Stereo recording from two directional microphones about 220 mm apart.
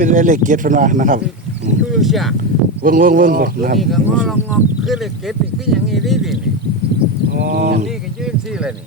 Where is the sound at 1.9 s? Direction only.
Centre (ahead or behind).